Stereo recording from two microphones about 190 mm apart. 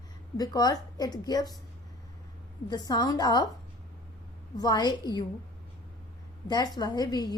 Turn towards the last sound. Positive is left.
turn(degrees=20)  # may be behind; listen again after turning